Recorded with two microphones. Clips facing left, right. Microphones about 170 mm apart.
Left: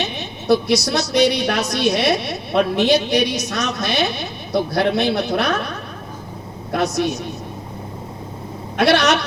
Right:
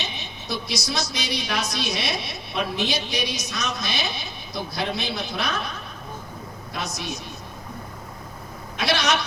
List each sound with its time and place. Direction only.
0.0 s a woman's voice: 65° left (ahead or behind)
8.8 s a woman's voice: 65° left (ahead or behind)